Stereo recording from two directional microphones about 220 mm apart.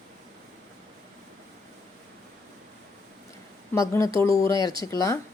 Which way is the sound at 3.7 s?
15° left (ahead or behind).